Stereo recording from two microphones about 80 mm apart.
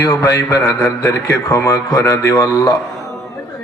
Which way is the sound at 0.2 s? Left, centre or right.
Left.